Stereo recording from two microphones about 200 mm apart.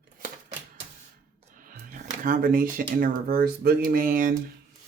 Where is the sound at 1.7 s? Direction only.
40° right (ahead or behind).